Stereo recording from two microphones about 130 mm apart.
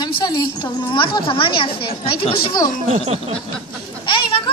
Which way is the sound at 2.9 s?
55° right (ahead or behind).